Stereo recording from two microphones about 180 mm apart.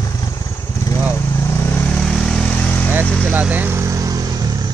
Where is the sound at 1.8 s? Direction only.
5° left (ahead or behind).